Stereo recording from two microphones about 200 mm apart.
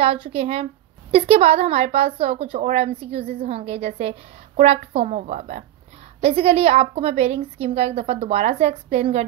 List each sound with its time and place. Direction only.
0.0 s a woman's voice: 30° right (ahead or behind)